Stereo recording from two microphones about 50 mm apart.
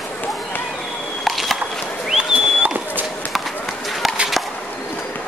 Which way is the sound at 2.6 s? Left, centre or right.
Right.